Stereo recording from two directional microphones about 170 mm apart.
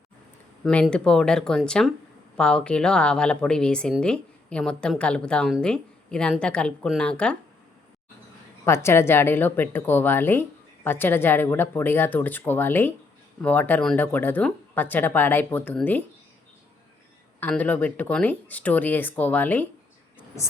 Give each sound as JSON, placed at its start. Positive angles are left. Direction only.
{"t": 0.6, "sound": "a woman's voice", "side_deg": 5}
{"t": 8.6, "sound": "speech", "side_deg": 15}
{"t": 17.4, "sound": "speech", "side_deg": 10}
{"t": 20.1, "sound": "a sound", "side_deg": 15}